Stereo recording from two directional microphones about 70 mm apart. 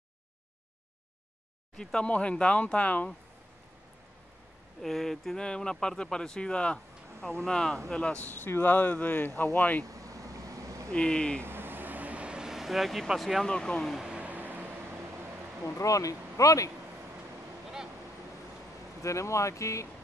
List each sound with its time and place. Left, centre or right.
1.8 s speech: centre
4.8 s speech: centre; by 9.8 s left
9.8 s vehicle: right
10.9 s speech: centre
11.4 s vehicle: right; by 13.5 s centre
13.5 s speech: centre
13.9 s music: centre; by 15.0 s right
15.6 s speech: left
19.0 s speech: left